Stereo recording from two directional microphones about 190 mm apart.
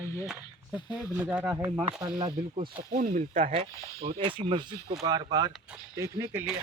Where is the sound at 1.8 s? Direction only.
20° right (ahead or behind).